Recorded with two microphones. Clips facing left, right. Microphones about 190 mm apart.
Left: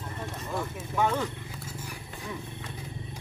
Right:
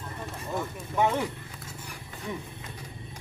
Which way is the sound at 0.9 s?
15° right (ahead or behind).